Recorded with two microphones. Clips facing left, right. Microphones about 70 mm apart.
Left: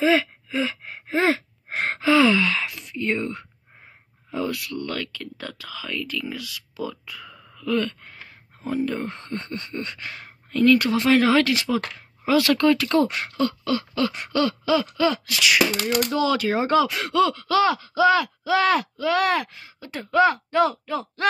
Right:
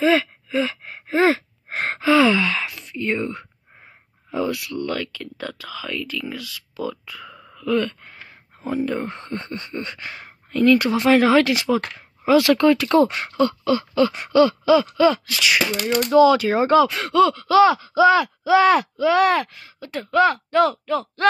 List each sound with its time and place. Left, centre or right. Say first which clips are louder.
0.0 s gasp: right 2 dB; centre
4.3 s a sound: right 3 dB; centre
8.6 s speech: right 2 dB; centre
19.4 s speech: right 2 dB; centre